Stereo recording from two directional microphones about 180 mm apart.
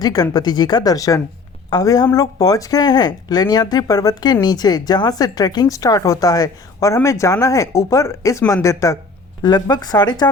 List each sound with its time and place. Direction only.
0.0 s speech: 20° left (ahead or behind)